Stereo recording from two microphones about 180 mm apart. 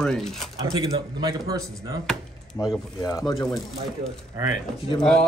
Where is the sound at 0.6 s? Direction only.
20° right (ahead or behind).